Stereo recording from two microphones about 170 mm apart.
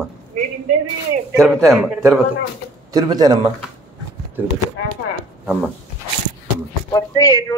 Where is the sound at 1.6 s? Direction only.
20° right (ahead or behind).